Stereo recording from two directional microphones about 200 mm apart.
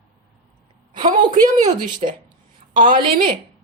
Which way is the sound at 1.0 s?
40° right (ahead or behind).